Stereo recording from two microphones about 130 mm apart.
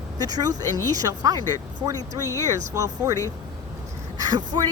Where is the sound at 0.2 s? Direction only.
30° right (ahead or behind).